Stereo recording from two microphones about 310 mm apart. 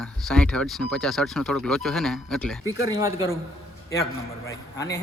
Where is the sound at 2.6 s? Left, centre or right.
Centre.